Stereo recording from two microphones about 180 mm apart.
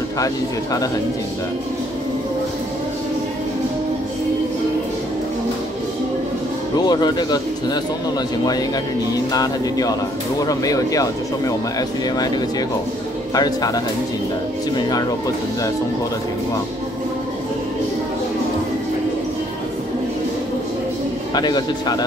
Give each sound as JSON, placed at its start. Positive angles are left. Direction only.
{"t": 6.8, "sound": "speech", "side_deg": 25}
{"t": 9.3, "sound": "speech", "side_deg": 20}
{"t": 13.3, "sound": "speech", "side_deg": 20}
{"t": 14.8, "sound": "speech", "side_deg": 20}
{"t": 21.4, "sound": "speech", "side_deg": 25}